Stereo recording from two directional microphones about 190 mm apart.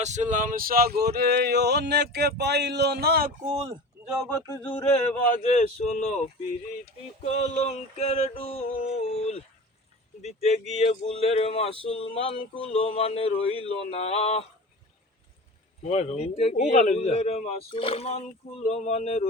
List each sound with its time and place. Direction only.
0.0 s a sound: 40° right (ahead or behind); by 3.3 s 55° right (ahead or behind)
3.4 s speech: 30° right (ahead or behind)
4.0 s speech: 5° right (ahead or behind)
4.3 s a sound: 10° left (ahead or behind)
5.5 s a man's voice: 35° left (ahead or behind)
15.8 s a man's voice: 35° left (ahead or behind)